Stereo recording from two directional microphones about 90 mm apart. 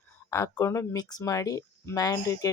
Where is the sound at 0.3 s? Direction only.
35° left (ahead or behind).